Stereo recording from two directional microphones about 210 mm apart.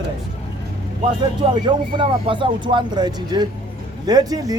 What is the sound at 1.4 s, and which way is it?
Speech, 20° right (ahead or behind).